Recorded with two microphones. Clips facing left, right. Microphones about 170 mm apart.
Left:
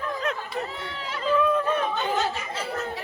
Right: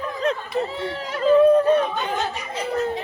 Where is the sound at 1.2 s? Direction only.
40° right (ahead or behind).